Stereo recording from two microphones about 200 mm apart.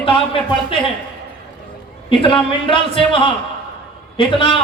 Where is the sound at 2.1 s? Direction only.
25° left (ahead or behind).